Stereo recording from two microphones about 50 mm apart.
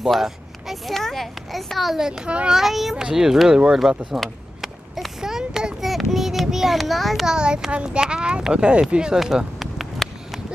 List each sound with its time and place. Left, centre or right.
0.1 s speech: centre
0.9 s a sound: centre
2.0 s speech: centre
2.2 s a child's voice: right
2.5 s speech: centre
4.2 s a sound: centre
5.8 s a child's voice: centre
7.2 s speech: centre